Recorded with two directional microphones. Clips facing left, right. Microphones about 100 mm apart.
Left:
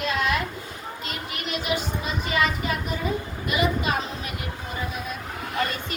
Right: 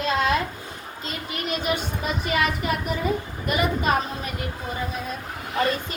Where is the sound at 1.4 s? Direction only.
45° right (ahead or behind).